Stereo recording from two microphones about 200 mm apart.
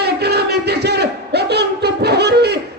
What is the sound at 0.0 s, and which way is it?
Battle cry, 55° right (ahead or behind).